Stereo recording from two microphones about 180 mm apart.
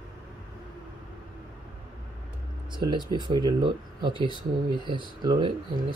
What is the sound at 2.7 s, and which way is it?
Speech, 25° right (ahead or behind).